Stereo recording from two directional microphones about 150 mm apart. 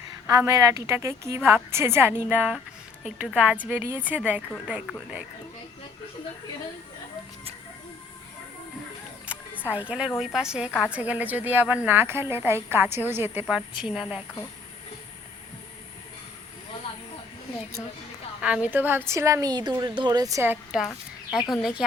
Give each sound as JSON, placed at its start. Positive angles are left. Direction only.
{"t": 0.3, "sound": "a woman's voice", "side_deg": -20}
{"t": 9.2, "sound": "music", "side_deg": -10}
{"t": 10.2, "sound": "a woman's voice", "side_deg": -5}
{"t": 10.7, "sound": "a woman's voice", "side_deg": 10}
{"t": 10.9, "sound": "a woman's voice", "side_deg": -10}
{"t": 13.7, "sound": "a woman's voice", "side_deg": 0}
{"t": 18.3, "sound": "a woman's voice", "side_deg": -5}
{"t": 20.7, "sound": "speech", "side_deg": 0}